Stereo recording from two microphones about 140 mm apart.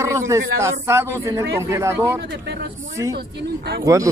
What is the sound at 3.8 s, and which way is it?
Speech, 20° right (ahead or behind).